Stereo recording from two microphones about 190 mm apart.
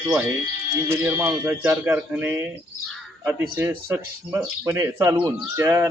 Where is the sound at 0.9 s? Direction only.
10° right (ahead or behind).